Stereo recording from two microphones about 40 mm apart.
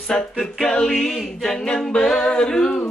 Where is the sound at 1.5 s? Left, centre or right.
Centre.